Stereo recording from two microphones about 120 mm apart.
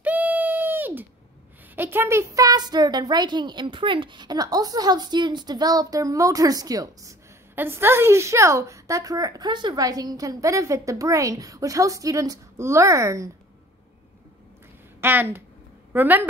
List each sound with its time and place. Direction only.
0.0 s a sound: 15° right (ahead or behind)
1.8 s speech: 20° right (ahead or behind)
7.5 s a woman's voice: 20° right (ahead or behind)
15.0 s a woman's voice: 15° right (ahead or behind)